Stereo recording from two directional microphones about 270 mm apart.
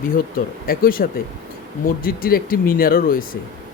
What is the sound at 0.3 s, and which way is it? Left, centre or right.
A man's voice, left.